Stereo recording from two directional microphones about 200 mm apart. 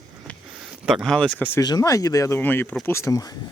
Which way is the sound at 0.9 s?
Centre (ahead or behind).